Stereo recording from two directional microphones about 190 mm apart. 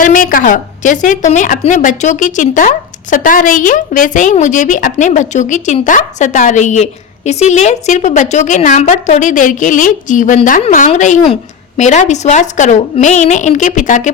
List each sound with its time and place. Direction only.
0.0 s a woman's voice: 45° left (ahead or behind)